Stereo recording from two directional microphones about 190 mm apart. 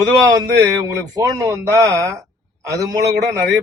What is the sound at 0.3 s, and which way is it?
Speech, 20° right (ahead or behind).